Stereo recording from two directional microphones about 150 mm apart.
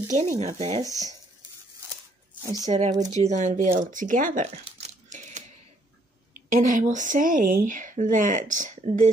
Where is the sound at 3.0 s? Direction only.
50° right (ahead or behind).